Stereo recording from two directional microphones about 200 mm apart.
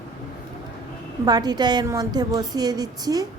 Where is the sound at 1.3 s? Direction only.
20° right (ahead or behind).